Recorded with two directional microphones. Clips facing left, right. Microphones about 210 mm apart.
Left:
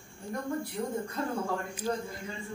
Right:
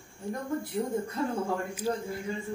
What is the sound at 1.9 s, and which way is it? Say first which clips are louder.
Speech: right 1 dB; 10° right (ahead or behind).